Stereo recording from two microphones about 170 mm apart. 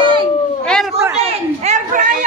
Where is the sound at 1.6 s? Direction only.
50° right (ahead or behind).